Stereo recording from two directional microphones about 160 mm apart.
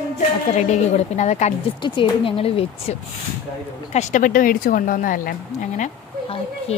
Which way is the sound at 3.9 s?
55° left (ahead or behind).